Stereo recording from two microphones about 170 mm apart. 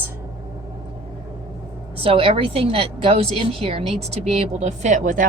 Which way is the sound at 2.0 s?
35° right (ahead or behind).